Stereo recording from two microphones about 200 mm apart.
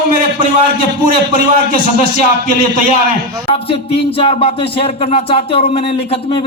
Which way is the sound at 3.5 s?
25° left (ahead or behind).